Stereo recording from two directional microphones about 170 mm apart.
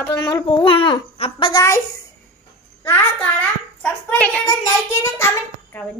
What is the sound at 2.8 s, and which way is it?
A child's voice, 10° left (ahead or behind).